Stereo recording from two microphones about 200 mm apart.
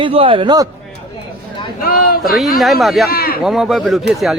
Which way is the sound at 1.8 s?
50° left (ahead or behind).